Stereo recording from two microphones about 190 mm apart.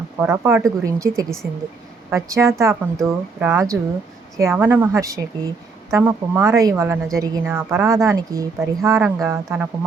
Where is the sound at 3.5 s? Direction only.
15° right (ahead or behind).